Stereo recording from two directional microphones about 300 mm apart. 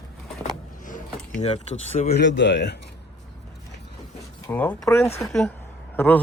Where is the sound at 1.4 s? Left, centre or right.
Left.